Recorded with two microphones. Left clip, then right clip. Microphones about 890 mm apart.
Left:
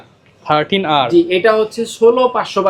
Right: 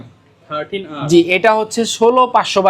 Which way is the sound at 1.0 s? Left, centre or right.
Right.